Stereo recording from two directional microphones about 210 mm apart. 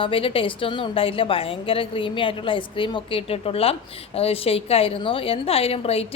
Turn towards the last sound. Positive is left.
turn(degrees=30)  # may be behind; listen again after turning